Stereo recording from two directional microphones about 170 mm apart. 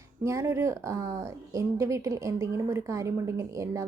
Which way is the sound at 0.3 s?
15° right (ahead or behind).